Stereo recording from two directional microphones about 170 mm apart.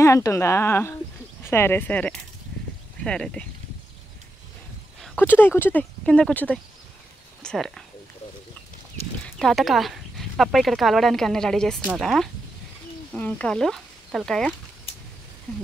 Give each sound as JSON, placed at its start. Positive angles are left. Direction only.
{"t": 0.0, "sound": "speech", "side_deg": 20}
{"t": 5.0, "sound": "speech", "side_deg": 10}
{"t": 9.2, "sound": "speech", "side_deg": 5}